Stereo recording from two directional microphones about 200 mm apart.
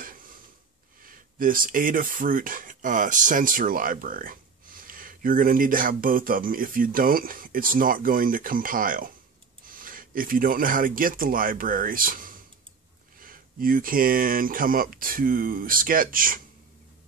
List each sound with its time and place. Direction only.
1.0 s speech: 45° right (ahead or behind)